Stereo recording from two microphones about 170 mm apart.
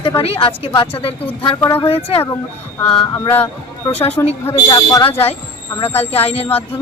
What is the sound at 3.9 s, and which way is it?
Speech, 35° left (ahead or behind).